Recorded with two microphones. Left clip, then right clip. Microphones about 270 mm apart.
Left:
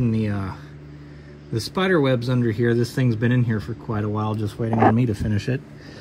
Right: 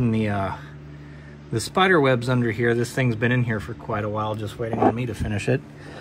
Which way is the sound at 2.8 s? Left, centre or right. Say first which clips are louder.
Even; centre.